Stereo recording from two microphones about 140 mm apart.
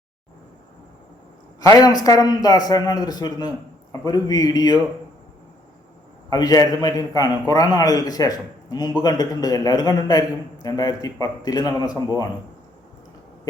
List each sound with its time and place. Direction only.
1.6 s a man's voice: 25° left (ahead or behind)
6.3 s a man's voice: 30° left (ahead or behind)